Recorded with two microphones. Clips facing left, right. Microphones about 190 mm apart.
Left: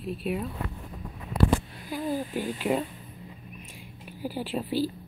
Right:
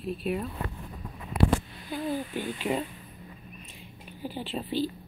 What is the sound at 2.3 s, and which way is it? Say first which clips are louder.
Speech: left 2 dB; 40° left (ahead or behind).